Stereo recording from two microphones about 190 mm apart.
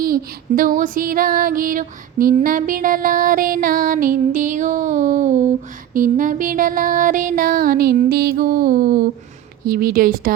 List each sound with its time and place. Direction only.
0.0 s female singing: 50° right (ahead or behind)